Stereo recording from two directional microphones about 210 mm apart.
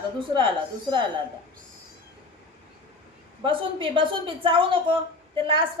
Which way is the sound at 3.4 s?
25° right (ahead or behind).